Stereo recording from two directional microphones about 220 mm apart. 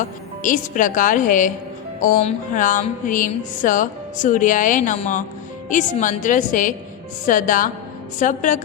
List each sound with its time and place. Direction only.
0.0 s music: 35° left (ahead or behind)